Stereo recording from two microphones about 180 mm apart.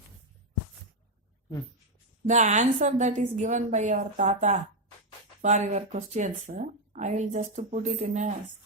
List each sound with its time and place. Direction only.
2.2 s speech: 40° right (ahead or behind)